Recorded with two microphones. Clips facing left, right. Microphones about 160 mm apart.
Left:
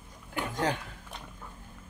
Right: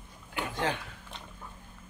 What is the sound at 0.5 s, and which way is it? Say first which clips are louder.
Speech: left 2 dB; 45° left (ahead or behind).